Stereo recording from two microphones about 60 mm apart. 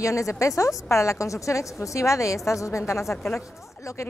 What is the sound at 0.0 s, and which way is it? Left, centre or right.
A woman's voice, left.